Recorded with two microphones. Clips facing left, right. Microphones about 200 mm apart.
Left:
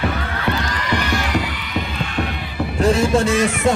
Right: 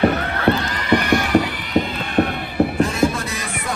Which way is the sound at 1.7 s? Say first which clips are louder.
Right 7 dB; 55° right (ahead or behind).